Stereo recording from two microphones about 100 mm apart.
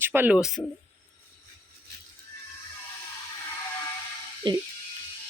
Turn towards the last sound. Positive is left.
turn(degrees=-55)  # may be behind; listen again after turning